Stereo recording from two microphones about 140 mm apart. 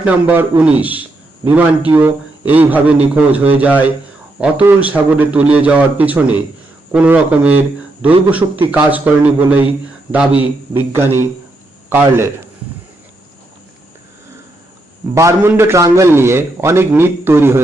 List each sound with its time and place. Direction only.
0.0 s a man's voice: 10° right (ahead or behind)
15.1 s a man's voice: 20° right (ahead or behind)